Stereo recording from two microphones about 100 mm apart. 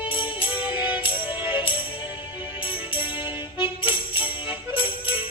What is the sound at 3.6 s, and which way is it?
Music, 60° left (ahead or behind).